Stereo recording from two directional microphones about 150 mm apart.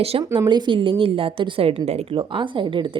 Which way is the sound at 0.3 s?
30° right (ahead or behind).